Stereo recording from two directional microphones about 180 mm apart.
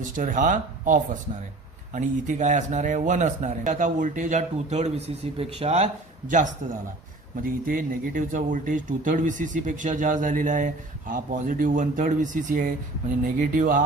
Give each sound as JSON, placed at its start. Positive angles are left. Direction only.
{"t": 0.0, "sound": "speech", "side_deg": -45}